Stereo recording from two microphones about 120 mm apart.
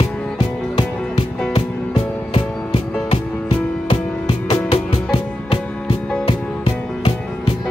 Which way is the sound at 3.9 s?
50° left (ahead or behind).